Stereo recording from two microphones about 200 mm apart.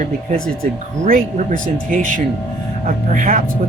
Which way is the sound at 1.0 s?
45° right (ahead or behind).